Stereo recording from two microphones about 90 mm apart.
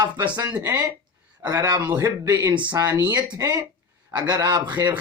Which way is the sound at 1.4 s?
50° right (ahead or behind).